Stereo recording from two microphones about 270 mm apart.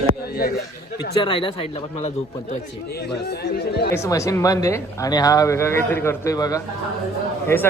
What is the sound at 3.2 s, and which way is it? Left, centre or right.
Speech, left.